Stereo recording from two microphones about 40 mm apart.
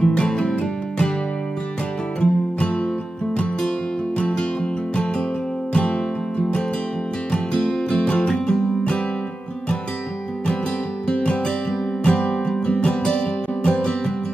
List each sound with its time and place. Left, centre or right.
0.0 s music: left
2.1 s music: left
4.2 s music: left
5.7 s music: left
11.1 s music: left